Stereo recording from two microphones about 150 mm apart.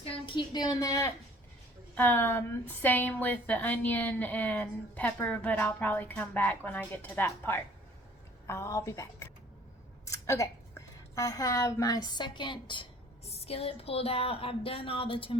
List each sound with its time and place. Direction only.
0.0 s a woman's voice: 35° left (ahead or behind)
2.0 s a woman's voice: 15° left (ahead or behind); by 15.4 s 35° left (ahead or behind)